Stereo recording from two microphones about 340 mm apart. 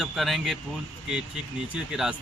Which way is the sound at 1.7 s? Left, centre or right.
Centre.